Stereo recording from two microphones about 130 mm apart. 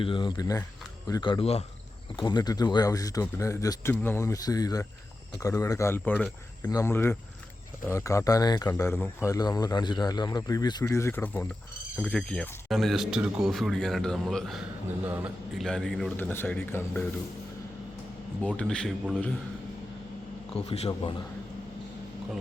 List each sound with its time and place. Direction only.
0.0 s speech: 40° left (ahead or behind)
2.1 s speech: 30° left (ahead or behind); by 6.7 s 10° left (ahead or behind)
6.7 s speech: 20° left (ahead or behind)
8.6 s a man's voice: 15° left (ahead or behind); by 14.6 s centre (ahead or behind)
15.0 s a man's voice: 15° right (ahead or behind)
15.5 s a man's voice: 5° left (ahead or behind)
16.1 s speech: 15° left (ahead or behind)
18.4 s speech: 5° left (ahead or behind)
20.6 s a man's voice: 55° left (ahead or behind)